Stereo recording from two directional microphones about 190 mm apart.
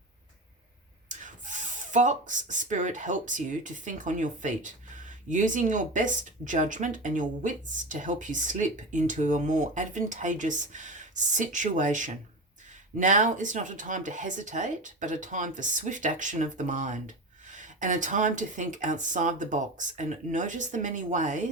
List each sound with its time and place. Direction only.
1.0 s speech: 40° right (ahead or behind)